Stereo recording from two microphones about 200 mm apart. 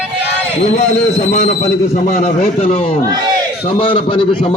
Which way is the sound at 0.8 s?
35° left (ahead or behind).